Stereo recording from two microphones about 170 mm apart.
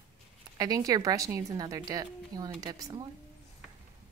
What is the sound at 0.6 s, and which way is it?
A woman's voice, 20° right (ahead or behind).